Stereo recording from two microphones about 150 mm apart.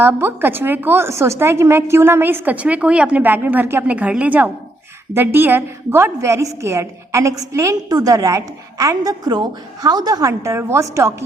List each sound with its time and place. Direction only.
0.0 s a woman's voice: 15° right (ahead or behind)